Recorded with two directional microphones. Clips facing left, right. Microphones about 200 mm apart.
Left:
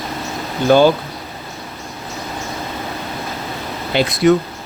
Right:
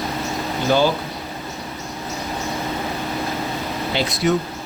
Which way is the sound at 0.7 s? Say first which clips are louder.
Left 6 dB; 60° left (ahead or behind).